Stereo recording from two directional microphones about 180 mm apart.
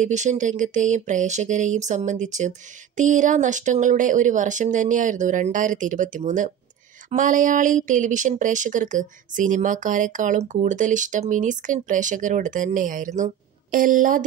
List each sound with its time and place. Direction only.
0.0 s speech: 40° right (ahead or behind)